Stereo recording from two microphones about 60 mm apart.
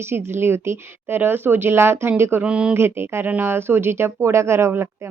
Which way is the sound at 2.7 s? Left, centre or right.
Right.